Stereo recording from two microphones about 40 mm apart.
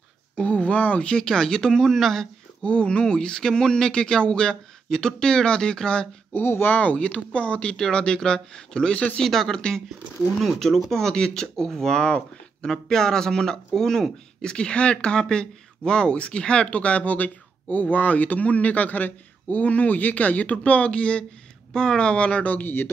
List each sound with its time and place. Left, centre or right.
0.4 s a sound: left
1.1 s speech: centre
2.6 s speech: left
6.3 s speech: left
6.7 s speech: left
8.9 s speech: left
9.2 s speech: centre
9.6 s speech: centre
10.4 s speech: centre; by 22.4 s left
22.4 s speech: left